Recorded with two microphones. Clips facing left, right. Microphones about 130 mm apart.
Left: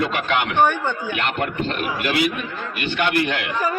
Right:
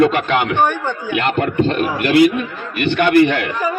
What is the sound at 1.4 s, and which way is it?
Speech, 40° right (ahead or behind).